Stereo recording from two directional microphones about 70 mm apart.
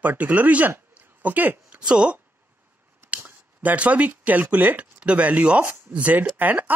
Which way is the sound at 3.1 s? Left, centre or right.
Right.